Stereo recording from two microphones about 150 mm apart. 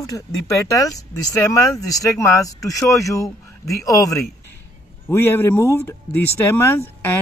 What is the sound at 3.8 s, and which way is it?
Speech, 25° left (ahead or behind).